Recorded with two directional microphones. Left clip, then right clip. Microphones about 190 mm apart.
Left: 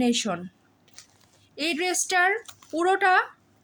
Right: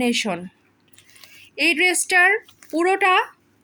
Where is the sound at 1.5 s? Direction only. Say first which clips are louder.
Right 8 dB; 10° right (ahead or behind).